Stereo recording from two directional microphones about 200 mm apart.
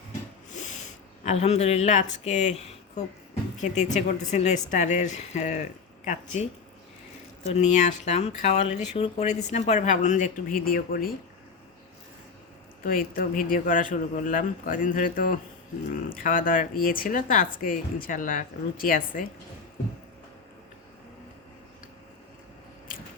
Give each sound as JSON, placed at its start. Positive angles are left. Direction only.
{"t": 1.2, "sound": "speech", "side_deg": 35}
{"t": 7.5, "sound": "speech", "side_deg": 35}
{"t": 12.8, "sound": "speech", "side_deg": 45}